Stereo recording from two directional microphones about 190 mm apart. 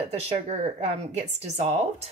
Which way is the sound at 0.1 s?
35° right (ahead or behind).